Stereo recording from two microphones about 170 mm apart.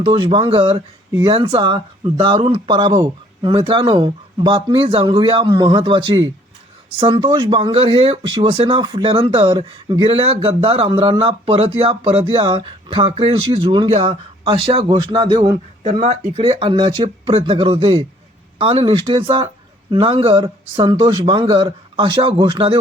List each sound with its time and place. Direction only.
0.3 s speech: 30° right (ahead or behind)